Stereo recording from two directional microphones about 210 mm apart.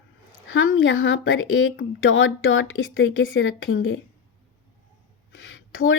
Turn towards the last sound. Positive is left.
turn(degrees=70)  # may be behind; listen again after turning